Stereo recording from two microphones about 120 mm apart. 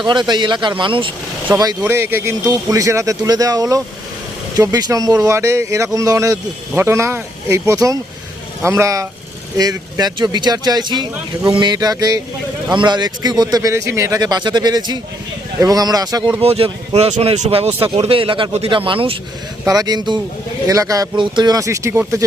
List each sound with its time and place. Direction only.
0.0 s speech: 40° right (ahead or behind)
1.8 s speech: 20° right (ahead or behind)
16.4 s speech: 55° right (ahead or behind)
19.6 s speech: 30° right (ahead or behind)